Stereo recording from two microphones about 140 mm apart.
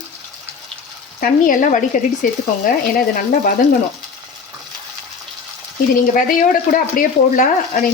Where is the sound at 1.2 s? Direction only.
75° left (ahead or behind).